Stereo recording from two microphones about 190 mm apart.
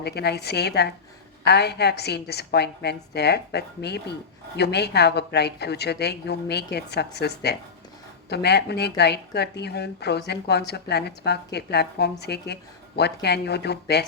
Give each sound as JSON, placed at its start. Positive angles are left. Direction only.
{"t": 0.0, "sound": "a woman's voice", "side_deg": 60}